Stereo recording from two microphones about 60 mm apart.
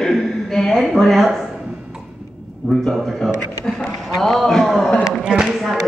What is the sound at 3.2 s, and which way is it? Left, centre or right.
A man's voice, centre.